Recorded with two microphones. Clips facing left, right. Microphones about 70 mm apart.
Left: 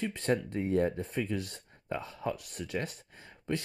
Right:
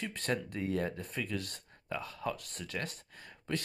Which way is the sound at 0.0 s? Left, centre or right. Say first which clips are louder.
Left 5 dB; left.